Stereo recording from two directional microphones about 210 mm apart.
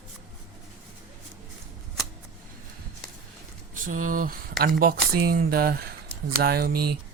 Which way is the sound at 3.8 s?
40° right (ahead or behind).